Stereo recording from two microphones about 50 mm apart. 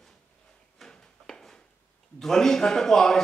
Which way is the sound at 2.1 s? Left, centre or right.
Centre.